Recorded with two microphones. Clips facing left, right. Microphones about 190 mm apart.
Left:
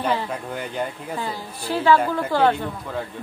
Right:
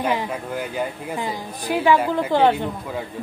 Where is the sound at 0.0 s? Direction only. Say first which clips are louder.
Right 1 dB; 10° right (ahead or behind).